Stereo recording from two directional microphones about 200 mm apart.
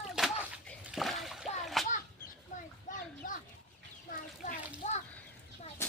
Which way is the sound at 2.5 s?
40° left (ahead or behind).